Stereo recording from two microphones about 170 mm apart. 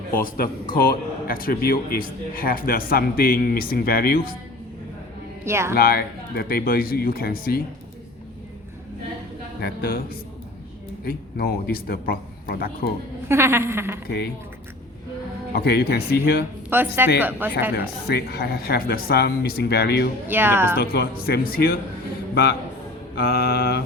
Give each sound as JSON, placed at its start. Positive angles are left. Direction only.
{"t": 0.1, "sound": "a man's voice", "side_deg": 55}
{"t": 5.5, "sound": "a woman's voice", "side_deg": -15}
{"t": 5.7, "sound": "a man's voice", "side_deg": 60}
{"t": 9.6, "sound": "a man's voice", "side_deg": 65}
{"t": 13.2, "sound": "a woman's voice", "side_deg": -15}
{"t": 15.5, "sound": "speech", "side_deg": 70}
{"t": 16.6, "sound": "a woman's voice", "side_deg": -10}
{"t": 17.7, "sound": "speech", "side_deg": 70}
{"t": 20.2, "sound": "a woman's voice", "side_deg": -10}
{"t": 20.7, "sound": "a man's voice", "side_deg": 65}
{"t": 23.1, "sound": "a man's voice", "side_deg": 65}